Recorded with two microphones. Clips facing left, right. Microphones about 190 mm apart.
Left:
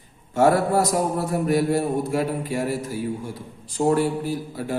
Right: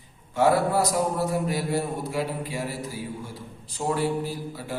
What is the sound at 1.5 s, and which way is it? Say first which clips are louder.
Mantra: left 6 dB; 50° left (ahead or behind).